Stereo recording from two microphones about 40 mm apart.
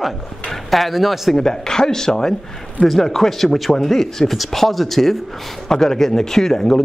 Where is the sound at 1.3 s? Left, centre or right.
Centre.